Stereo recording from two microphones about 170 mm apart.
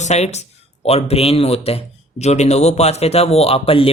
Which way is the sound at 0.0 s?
40° left (ahead or behind).